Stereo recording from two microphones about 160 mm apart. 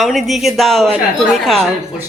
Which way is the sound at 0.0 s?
Centre (ahead or behind).